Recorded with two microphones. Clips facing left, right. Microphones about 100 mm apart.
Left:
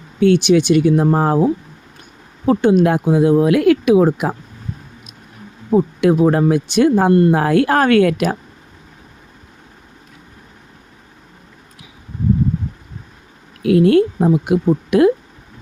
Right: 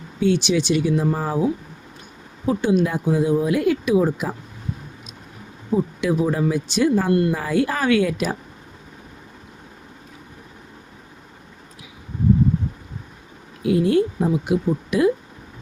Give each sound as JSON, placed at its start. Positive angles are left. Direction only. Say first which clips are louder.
{"t": 0.2, "sound": "speech", "louder": "left 7 dB", "side_deg": 55}
{"t": 2.5, "sound": "speech", "louder": "left 6 dB", "side_deg": 55}
{"t": 5.7, "sound": "speech", "louder": "left 7 dB", "side_deg": 60}
{"t": 7.1, "sound": "speech", "louder": "left 6 dB", "side_deg": 35}
{"t": 7.3, "sound": "speech", "louder": "left 8 dB", "side_deg": 65}
{"t": 13.6, "sound": "speech", "louder": "left 6 dB", "side_deg": 70}